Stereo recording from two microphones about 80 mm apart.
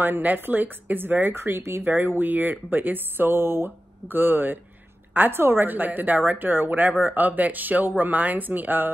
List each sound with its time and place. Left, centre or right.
0.0 s speech: right